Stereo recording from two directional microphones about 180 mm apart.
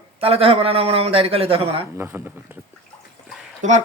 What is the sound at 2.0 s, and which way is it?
Speech, 10° right (ahead or behind).